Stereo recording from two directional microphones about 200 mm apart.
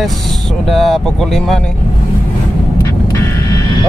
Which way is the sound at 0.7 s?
Centre (ahead or behind).